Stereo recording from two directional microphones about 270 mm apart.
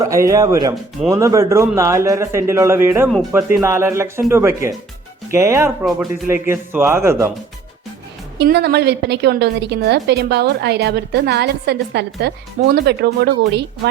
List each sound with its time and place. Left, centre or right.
0.0 s speech: centre
8.4 s a woman's voice: right